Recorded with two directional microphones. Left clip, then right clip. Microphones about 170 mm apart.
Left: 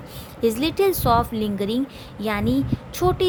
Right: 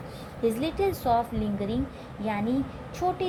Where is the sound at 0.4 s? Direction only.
40° left (ahead or behind).